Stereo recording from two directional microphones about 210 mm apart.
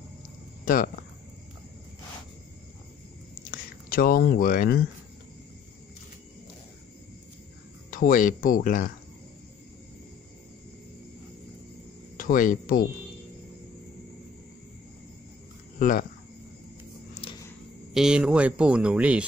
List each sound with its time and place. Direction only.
3.5 s speech: 45° left (ahead or behind)
7.9 s speech: 40° left (ahead or behind)
12.2 s speech: 40° left (ahead or behind)
15.8 s a sound: 40° left (ahead or behind)
17.1 s a sound: 25° left (ahead or behind)
17.9 s speech: 5° right (ahead or behind)